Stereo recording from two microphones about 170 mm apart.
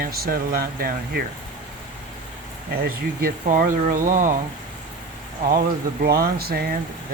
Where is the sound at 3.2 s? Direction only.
55° right (ahead or behind).